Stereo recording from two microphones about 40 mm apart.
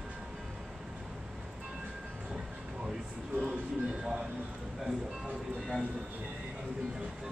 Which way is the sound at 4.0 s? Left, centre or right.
Centre.